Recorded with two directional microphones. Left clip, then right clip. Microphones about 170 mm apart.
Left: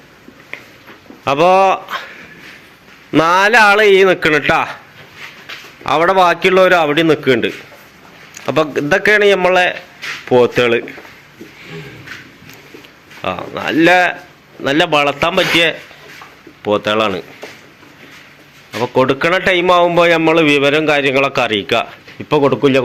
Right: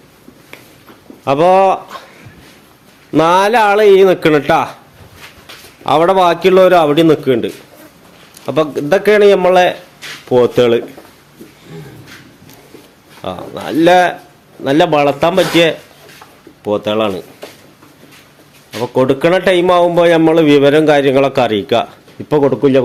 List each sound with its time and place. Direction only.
1.2 s speech: 5° right (ahead or behind)
3.1 s a man's voice: 10° right (ahead or behind)
5.8 s a man's voice: 10° right (ahead or behind)
13.2 s a man's voice: 15° right (ahead or behind)
18.9 s a man's voice: 15° right (ahead or behind)